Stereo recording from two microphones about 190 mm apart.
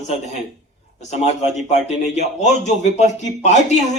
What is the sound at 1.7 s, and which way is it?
Speech, 35° left (ahead or behind).